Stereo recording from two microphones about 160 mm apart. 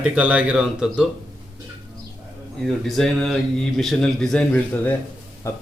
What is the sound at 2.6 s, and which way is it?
A man's voice, 5° left (ahead or behind).